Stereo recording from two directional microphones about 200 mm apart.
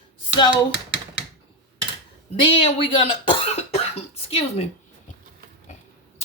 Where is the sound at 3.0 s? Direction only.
30° left (ahead or behind).